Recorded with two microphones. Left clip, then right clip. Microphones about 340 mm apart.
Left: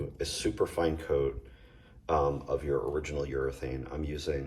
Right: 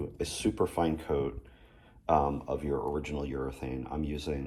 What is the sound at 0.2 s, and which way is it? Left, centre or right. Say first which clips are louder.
Speech: even; centre.